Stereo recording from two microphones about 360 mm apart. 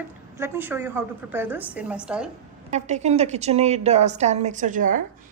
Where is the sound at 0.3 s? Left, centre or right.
Centre.